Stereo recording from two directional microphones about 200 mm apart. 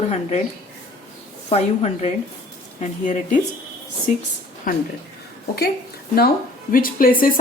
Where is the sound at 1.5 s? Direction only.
30° left (ahead or behind).